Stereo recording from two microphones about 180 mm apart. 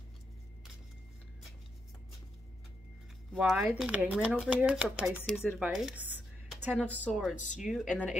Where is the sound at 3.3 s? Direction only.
5° right (ahead or behind).